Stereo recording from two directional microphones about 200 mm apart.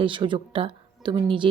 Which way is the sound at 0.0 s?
25° right (ahead or behind).